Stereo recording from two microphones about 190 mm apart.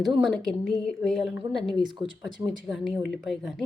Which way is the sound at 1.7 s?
25° right (ahead or behind).